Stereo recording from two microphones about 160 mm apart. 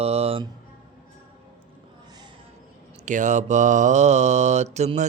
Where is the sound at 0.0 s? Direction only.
40° right (ahead or behind).